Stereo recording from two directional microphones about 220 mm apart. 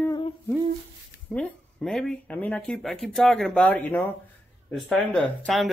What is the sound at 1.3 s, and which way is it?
Speech, 5° left (ahead or behind).